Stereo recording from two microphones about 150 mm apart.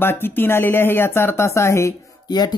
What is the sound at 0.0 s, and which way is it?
Speech, 15° left (ahead or behind).